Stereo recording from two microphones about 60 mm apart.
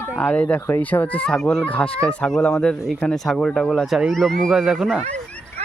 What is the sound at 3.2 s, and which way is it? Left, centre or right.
Speech, centre.